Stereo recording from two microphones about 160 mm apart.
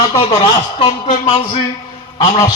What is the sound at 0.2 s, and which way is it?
Speech, 40° left (ahead or behind).